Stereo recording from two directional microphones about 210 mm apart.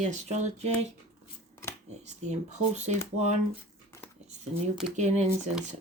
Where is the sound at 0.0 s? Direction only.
35° right (ahead or behind).